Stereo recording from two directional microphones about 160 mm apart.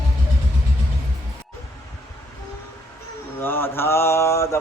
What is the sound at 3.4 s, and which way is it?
Mantra, 15° left (ahead or behind).